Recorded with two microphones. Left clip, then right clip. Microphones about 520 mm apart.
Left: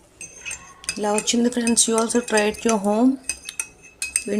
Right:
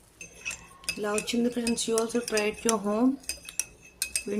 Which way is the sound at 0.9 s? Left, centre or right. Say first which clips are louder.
Left 8 dB; right.